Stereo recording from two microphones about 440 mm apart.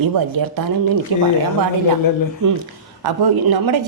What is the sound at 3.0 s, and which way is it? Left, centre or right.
Speech, right.